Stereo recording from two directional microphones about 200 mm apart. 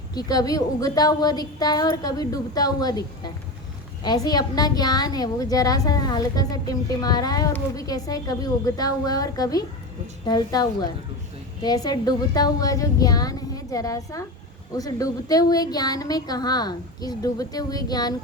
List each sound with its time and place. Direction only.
0.1 s a woman's voice: 20° left (ahead or behind)